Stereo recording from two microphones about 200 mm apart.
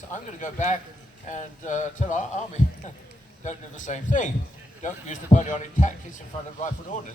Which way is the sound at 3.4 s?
40° left (ahead or behind).